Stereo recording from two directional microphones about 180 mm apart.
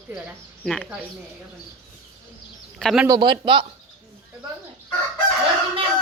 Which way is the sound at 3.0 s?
20° right (ahead or behind).